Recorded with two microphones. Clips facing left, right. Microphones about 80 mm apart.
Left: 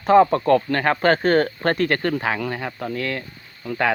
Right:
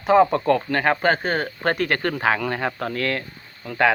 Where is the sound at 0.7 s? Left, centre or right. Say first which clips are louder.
Even; right.